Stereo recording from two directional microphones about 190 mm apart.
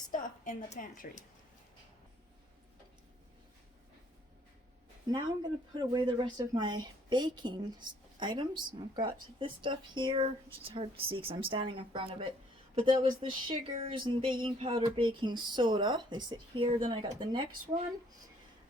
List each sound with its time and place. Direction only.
0.1 s a woman's voice: 45° left (ahead or behind)
5.0 s speech: 20° right (ahead or behind)